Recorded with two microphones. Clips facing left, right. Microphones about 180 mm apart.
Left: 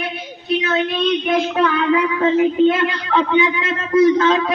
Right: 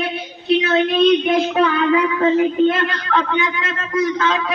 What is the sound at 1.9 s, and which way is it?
A man's voice, 10° left (ahead or behind).